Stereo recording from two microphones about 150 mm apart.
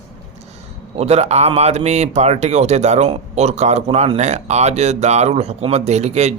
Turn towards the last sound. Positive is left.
turn(degrees=-50)  # may be behind; listen again after turning